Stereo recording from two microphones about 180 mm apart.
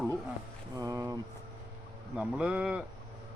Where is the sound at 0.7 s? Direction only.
20° right (ahead or behind).